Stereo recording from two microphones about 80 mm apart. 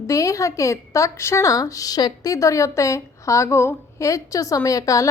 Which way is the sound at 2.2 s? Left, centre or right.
Left.